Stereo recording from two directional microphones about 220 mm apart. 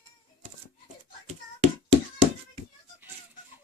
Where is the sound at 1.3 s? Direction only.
30° right (ahead or behind).